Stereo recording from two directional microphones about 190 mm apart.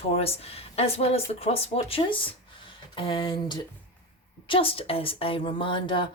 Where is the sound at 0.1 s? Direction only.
30° left (ahead or behind).